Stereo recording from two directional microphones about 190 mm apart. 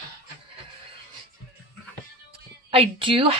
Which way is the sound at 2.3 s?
30° right (ahead or behind).